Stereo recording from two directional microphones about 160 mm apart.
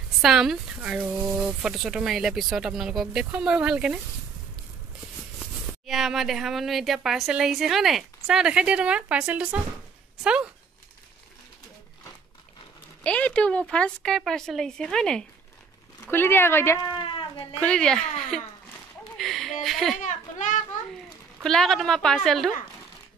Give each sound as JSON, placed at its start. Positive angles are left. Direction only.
{"t": 0.2, "sound": "speech", "side_deg": 0}
{"t": 5.7, "sound": "speech", "side_deg": 0}
{"t": 13.0, "sound": "speech", "side_deg": 10}
{"t": 17.0, "sound": "a sound", "side_deg": 30}
{"t": 17.6, "sound": "speech", "side_deg": 5}
{"t": 19.1, "sound": "a sound", "side_deg": 0}
{"t": 19.6, "sound": "speech", "side_deg": 0}
{"t": 20.0, "sound": "children playing", "side_deg": 50}
{"t": 21.4, "sound": "speech", "side_deg": 5}